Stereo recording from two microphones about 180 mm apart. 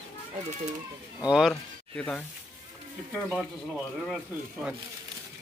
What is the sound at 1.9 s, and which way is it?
Speech, 5° left (ahead or behind).